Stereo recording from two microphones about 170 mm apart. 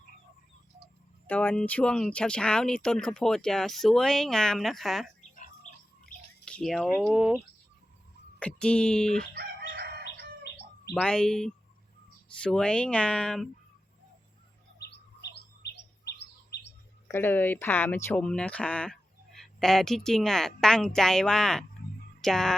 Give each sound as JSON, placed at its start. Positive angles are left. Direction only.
{"t": 1.3, "sound": "speech", "side_deg": 10}
{"t": 6.4, "sound": "speech", "side_deg": 5}
{"t": 8.4, "sound": "speech", "side_deg": 5}
{"t": 9.3, "sound": "chicken", "side_deg": -75}
{"t": 10.0, "sound": "bird", "side_deg": 75}
{"t": 10.9, "sound": "speech", "side_deg": 5}
{"t": 14.8, "sound": "bird", "side_deg": 80}
{"t": 17.1, "sound": "speech", "side_deg": 10}